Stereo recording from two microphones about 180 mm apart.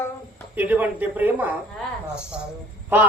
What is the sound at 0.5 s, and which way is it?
A man's voice, 10° right (ahead or behind).